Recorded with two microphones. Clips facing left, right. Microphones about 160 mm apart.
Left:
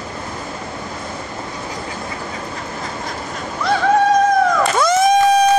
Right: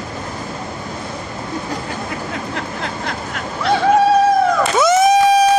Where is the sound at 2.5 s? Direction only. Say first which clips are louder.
Right 3 dB; 75° right (ahead or behind).